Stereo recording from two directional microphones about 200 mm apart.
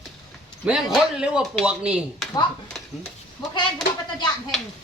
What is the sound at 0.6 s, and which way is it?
Speech, 5° right (ahead or behind).